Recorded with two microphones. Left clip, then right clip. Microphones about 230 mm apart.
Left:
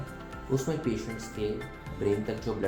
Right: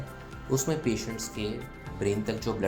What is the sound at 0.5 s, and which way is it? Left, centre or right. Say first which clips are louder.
Speech: right 2 dB; right.